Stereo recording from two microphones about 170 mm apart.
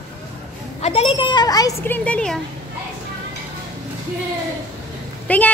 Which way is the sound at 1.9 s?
5° left (ahead or behind).